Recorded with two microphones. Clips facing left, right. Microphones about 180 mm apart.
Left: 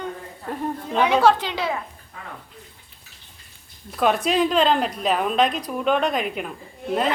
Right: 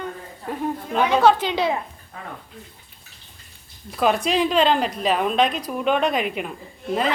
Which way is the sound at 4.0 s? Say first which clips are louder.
Even; centre (ahead or behind).